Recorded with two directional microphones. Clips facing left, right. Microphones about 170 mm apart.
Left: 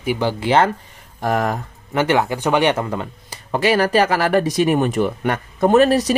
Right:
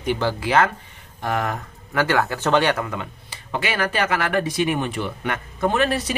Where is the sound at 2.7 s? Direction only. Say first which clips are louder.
Left 4 dB; 35° left (ahead or behind).